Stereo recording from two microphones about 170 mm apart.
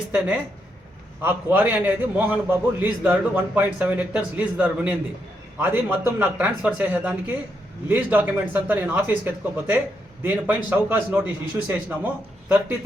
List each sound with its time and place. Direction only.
1.2 s a man's voice: 10° right (ahead or behind)